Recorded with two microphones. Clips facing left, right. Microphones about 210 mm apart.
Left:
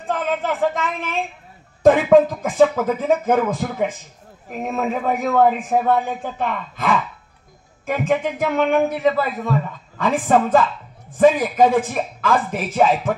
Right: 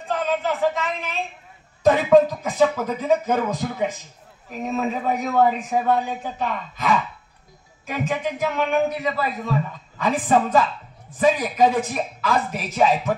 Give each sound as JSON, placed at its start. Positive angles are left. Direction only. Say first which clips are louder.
{"t": 0.1, "sound": "a woman's voice", "louder": "left 1 dB", "side_deg": 55}
{"t": 2.4, "sound": "a man's voice", "louder": "left 4 dB", "side_deg": 50}